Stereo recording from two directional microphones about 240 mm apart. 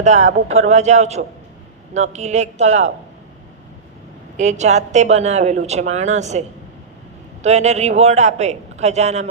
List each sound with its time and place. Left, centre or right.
0.0 s speech: right
4.4 s speech: right
7.4 s speech: right